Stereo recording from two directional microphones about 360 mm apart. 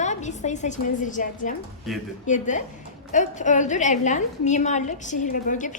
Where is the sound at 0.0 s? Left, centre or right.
Centre.